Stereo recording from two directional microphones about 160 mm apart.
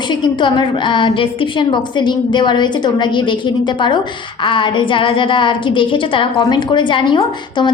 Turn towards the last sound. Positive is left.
turn(degrees=30)  # may be behind; listen again after turning